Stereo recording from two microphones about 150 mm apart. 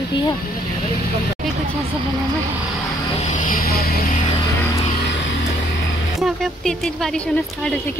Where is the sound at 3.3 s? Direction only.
65° left (ahead or behind); by 4.0 s 90° left.